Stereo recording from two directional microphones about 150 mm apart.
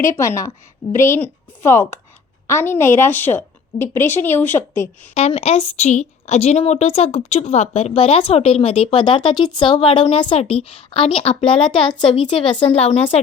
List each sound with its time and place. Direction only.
0.2 s a woman's voice: 20° left (ahead or behind)
5.1 s a woman's voice: 45° left (ahead or behind)